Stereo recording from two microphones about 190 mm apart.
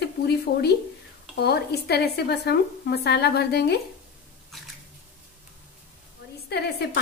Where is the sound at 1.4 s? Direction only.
60° left (ahead or behind).